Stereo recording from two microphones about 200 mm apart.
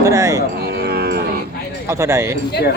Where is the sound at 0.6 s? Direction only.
55° right (ahead or behind).